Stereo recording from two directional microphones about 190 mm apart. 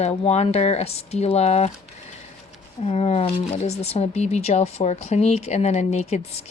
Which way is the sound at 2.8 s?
35° left (ahead or behind).